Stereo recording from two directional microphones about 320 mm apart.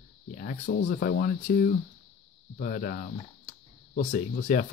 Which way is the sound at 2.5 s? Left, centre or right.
Left.